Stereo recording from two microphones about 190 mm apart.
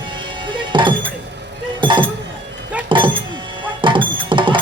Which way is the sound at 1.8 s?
25° right (ahead or behind).